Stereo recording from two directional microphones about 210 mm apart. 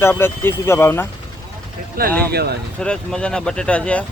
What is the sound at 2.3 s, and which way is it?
Speech, 50° right (ahead or behind).